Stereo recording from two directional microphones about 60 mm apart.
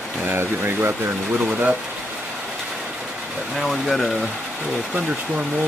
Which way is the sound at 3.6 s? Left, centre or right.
Centre.